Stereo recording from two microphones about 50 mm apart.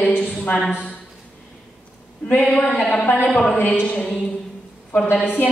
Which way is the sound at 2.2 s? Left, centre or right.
Left.